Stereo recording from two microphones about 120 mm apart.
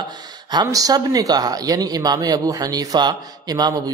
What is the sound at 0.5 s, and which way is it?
Speech, 35° right (ahead or behind).